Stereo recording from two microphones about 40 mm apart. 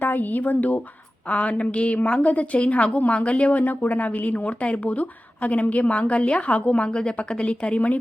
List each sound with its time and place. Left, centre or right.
0.0 s speech: left
1.3 s speech: left
3.6 s speech: left